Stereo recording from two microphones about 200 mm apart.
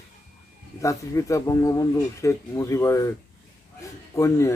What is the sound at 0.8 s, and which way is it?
Speech, 15° left (ahead or behind).